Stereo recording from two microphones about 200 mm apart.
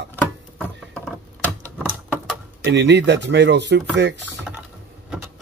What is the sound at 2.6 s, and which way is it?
Speech, 60° right (ahead or behind).